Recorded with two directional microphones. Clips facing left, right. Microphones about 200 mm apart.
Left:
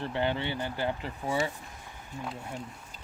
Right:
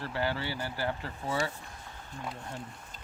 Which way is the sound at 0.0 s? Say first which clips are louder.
Left 3 dB; 20° left (ahead or behind).